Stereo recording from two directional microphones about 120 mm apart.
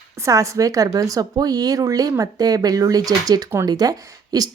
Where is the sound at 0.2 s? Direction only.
25° right (ahead or behind).